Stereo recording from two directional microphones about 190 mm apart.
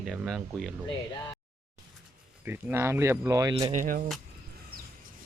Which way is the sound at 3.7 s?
45° right (ahead or behind).